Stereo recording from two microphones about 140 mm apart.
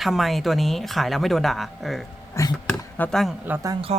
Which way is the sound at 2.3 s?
20° left (ahead or behind).